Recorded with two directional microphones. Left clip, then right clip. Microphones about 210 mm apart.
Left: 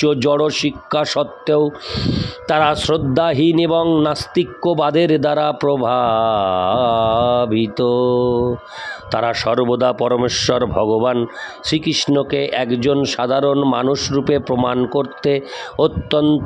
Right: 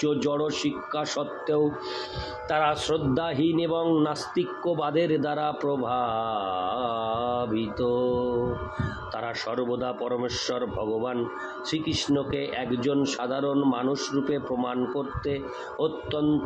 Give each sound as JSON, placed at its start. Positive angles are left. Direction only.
{"t": 0.0, "sound": "speech", "side_deg": 50}